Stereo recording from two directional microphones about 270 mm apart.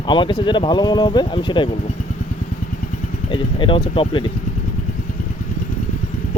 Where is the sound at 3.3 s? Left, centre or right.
Centre.